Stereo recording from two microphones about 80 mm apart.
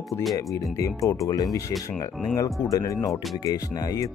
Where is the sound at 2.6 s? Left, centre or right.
Left.